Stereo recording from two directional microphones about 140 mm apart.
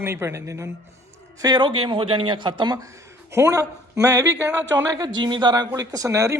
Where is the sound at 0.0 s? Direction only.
20° right (ahead or behind).